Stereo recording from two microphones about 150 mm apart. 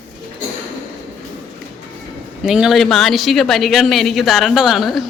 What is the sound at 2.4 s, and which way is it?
A woman's voice, 5° right (ahead or behind).